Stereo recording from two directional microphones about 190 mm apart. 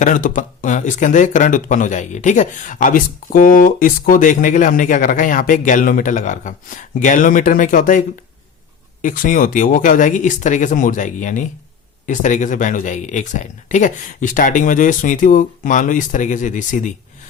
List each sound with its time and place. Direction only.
0.0 s speech: 45° left (ahead or behind)